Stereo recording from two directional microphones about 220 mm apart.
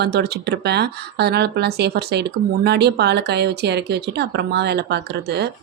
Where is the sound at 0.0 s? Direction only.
45° right (ahead or behind).